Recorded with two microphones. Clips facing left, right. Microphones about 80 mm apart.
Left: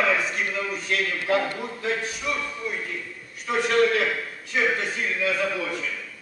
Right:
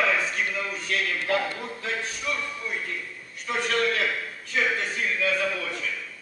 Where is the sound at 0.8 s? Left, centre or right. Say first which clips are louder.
Left 1 dB; centre.